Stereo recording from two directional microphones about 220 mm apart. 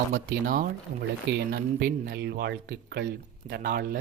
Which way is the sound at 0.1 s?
40° right (ahead or behind).